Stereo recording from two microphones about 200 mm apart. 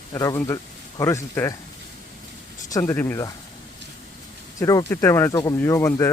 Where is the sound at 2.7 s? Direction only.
15° left (ahead or behind).